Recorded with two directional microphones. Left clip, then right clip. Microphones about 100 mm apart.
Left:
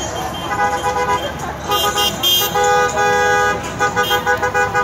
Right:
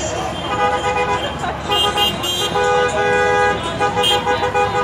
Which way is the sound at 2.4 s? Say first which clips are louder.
Left 1 dB; 5° left (ahead or behind).